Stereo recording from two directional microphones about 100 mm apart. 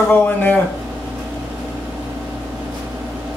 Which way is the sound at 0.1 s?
20° left (ahead or behind).